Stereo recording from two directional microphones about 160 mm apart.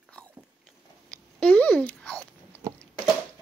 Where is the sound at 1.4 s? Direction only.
10° left (ahead or behind).